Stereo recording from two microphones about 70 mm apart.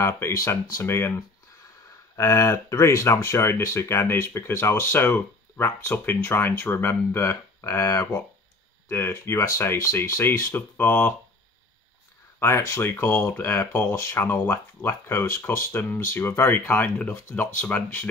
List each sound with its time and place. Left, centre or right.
0.0 s speech: left
2.1 s speech: left
8.8 s speech: left
10.5 s speech: left
12.4 s speech: left